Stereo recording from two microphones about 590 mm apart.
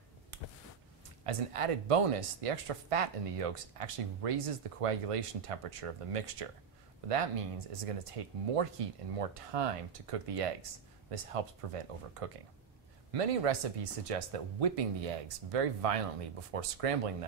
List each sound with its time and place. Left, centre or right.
1.2 s speech: right